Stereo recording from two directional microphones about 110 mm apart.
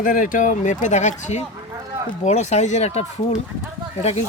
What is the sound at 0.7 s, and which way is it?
Speech, 90° left.